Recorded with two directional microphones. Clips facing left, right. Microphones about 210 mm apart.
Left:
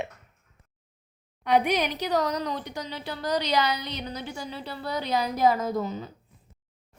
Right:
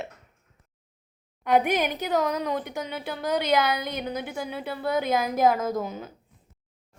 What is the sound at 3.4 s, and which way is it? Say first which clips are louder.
Speech: right 3 dB; 50° right (ahead or behind).